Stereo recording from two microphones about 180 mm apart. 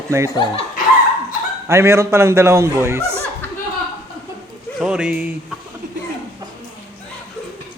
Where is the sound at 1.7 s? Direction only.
15° right (ahead or behind).